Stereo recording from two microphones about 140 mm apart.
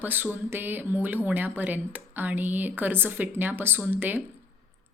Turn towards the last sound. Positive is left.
turn(degrees=-15)  # may be behind; listen again after turning